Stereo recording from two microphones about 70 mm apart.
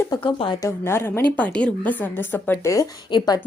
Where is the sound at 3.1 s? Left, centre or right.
Left.